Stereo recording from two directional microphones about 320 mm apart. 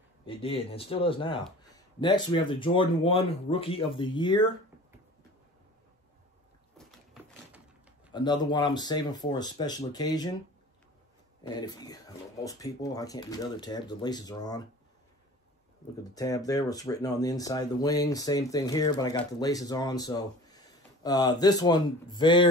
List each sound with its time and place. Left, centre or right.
0.2 s speech: centre
8.1 s speech: centre
11.4 s speech: centre
16.2 s speech: centre